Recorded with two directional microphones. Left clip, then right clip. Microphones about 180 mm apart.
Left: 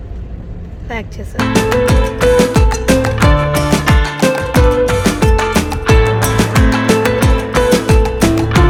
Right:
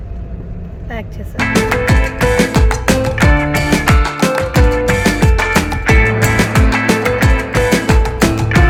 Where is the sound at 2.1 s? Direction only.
Centre (ahead or behind).